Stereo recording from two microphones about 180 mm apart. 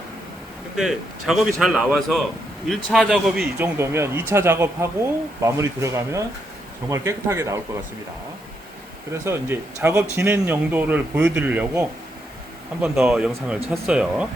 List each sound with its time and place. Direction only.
0.8 s a man's voice: centre (ahead or behind)
3.6 s a man's voice: 15° right (ahead or behind)
9.2 s a man's voice: 15° right (ahead or behind)